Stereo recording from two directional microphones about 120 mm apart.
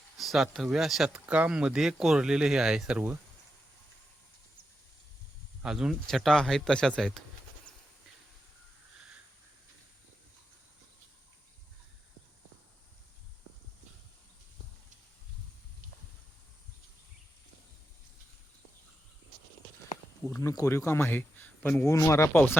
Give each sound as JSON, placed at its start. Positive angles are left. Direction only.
{"t": 0.2, "sound": "speech", "side_deg": 0}
{"t": 5.6, "sound": "speech", "side_deg": -5}
{"t": 20.4, "sound": "speech", "side_deg": 25}